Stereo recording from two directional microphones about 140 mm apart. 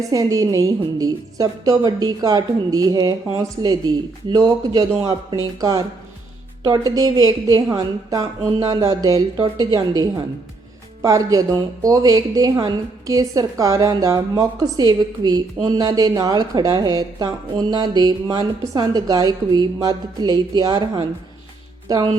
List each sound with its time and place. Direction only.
0.1 s a woman's voice: 25° right (ahead or behind)
4.9 s speech: 15° right (ahead or behind)
5.3 s a woman's voice: 30° right (ahead or behind)